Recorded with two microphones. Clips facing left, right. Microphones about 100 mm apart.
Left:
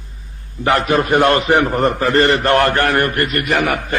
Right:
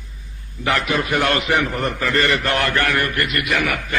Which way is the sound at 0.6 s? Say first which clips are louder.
Left 5 dB; 45° left (ahead or behind).